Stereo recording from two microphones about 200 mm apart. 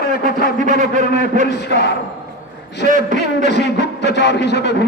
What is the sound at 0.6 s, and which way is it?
Speech, 40° right (ahead or behind).